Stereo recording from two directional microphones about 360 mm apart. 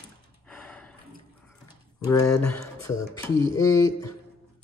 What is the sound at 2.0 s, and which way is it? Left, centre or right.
Speech, centre.